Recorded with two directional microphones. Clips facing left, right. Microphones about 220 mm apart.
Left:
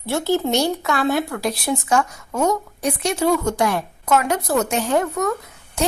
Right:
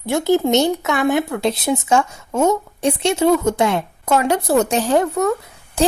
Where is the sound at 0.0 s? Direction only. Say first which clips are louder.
Right 4 dB; 15° right (ahead or behind).